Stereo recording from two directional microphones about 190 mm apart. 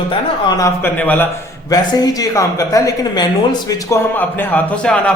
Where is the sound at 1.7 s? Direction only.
20° left (ahead or behind).